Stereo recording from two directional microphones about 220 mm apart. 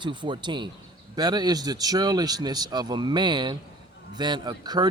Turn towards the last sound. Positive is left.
turn(degrees=-20)  # may be behind; listen again after turning